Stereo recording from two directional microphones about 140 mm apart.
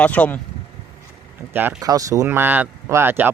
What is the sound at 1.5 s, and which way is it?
Speech, 15° right (ahead or behind).